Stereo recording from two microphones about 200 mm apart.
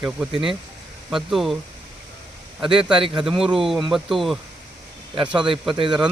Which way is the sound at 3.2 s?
Centre (ahead or behind).